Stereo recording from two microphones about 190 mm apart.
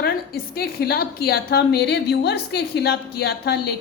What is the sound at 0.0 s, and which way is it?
A woman's voice, 55° left (ahead or behind).